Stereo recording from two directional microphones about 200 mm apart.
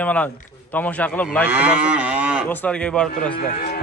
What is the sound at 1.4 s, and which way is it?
Moo, 5° right (ahead or behind).